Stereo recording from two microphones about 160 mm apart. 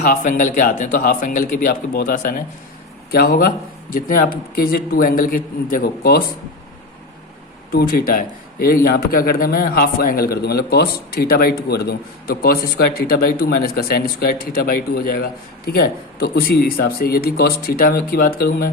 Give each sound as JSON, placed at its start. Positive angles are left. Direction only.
{"t": 0.0, "sound": "a man's voice", "side_deg": 55}
{"t": 3.1, "sound": "a man's voice", "side_deg": 70}
{"t": 7.7, "sound": "a man's voice", "side_deg": 70}